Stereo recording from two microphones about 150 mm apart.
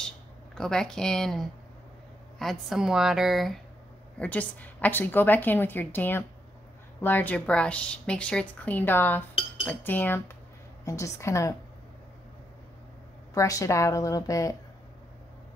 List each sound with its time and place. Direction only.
0.6 s a woman's voice: 5° left (ahead or behind)
4.2 s a woman's voice: 10° left (ahead or behind)
13.3 s a woman's voice: 20° left (ahead or behind)